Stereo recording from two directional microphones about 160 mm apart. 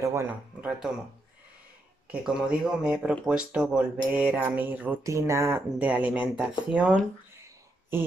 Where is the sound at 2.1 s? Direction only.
5° right (ahead or behind).